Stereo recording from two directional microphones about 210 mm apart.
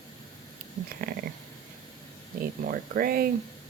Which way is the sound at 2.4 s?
45° right (ahead or behind).